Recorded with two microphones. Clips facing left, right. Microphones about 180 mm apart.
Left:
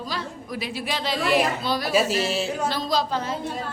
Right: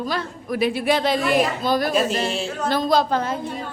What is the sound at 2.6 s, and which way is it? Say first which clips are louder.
Speech: right 10 dB; 55° right (ahead or behind).